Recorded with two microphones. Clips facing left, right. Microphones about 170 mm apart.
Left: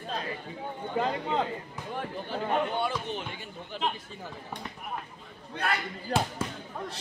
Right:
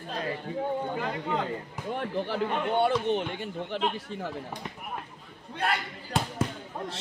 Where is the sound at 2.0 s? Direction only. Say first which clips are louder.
Right 4 dB; 65° right (ahead or behind).